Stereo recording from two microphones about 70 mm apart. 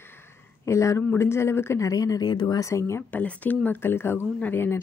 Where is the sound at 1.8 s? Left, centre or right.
Left.